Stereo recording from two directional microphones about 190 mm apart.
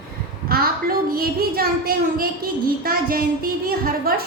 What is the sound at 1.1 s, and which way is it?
Speech, 50° right (ahead or behind).